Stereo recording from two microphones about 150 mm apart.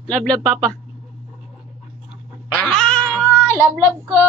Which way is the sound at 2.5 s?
5° left (ahead or behind).